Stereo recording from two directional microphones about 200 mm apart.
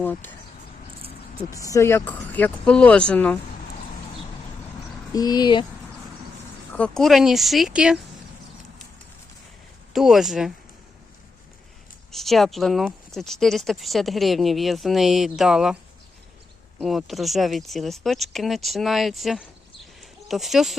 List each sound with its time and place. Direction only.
0.0 s speech: 10° left (ahead or behind)
1.5 s speech: 15° left (ahead or behind)
5.1 s speech: 20° left (ahead or behind)
6.7 s speech: 5° left (ahead or behind)
9.9 s speech: centre (ahead or behind)
12.1 s speech: centre (ahead or behind)
16.8 s speech: centre (ahead or behind)
20.0 s a sound: centre (ahead or behind)